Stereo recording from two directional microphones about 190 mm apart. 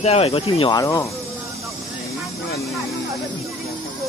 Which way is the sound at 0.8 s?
15° left (ahead or behind).